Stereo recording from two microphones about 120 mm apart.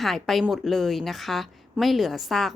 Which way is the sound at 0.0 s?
Centre (ahead or behind).